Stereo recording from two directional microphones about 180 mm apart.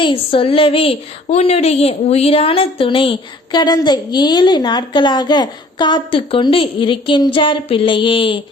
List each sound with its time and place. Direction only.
0.0 s a woman's voice: 30° left (ahead or behind)